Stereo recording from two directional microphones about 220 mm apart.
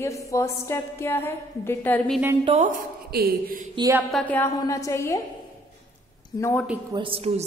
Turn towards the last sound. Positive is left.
turn(degrees=-25)  # may be behind; listen again after turning